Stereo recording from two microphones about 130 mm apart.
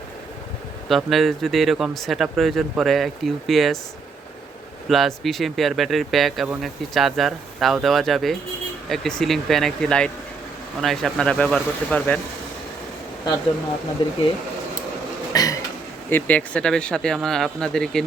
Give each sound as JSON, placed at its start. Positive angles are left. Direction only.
{"t": 0.9, "sound": "speech", "side_deg": 0}
{"t": 4.9, "sound": "speech", "side_deg": 0}
{"t": 14.0, "sound": "speech", "side_deg": 40}
{"t": 15.3, "sound": "a sound", "side_deg": 25}
{"t": 16.0, "sound": "speech", "side_deg": 15}